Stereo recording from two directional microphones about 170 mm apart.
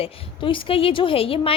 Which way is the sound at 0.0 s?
30° left (ahead or behind).